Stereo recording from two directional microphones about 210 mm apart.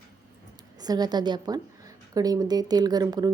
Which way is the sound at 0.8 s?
20° right (ahead or behind).